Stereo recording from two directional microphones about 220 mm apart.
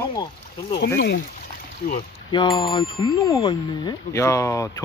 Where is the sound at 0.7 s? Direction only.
45° left (ahead or behind).